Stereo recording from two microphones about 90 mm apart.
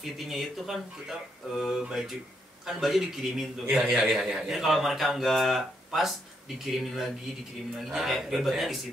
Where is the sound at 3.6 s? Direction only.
15° right (ahead or behind).